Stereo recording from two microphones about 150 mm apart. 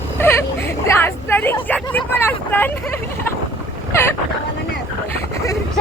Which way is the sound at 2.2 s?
15° left (ahead or behind).